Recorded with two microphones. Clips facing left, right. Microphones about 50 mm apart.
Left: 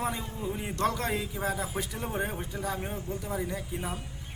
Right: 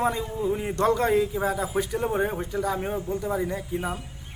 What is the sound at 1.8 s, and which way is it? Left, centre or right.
Speech, right.